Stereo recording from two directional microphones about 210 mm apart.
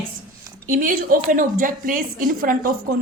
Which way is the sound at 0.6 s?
40° right (ahead or behind).